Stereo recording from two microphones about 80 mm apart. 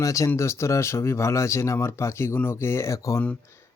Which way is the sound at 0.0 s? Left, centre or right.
Left.